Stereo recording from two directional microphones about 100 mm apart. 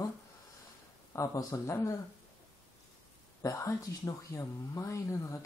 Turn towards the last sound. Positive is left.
turn(degrees=30)  # may be behind; listen again after turning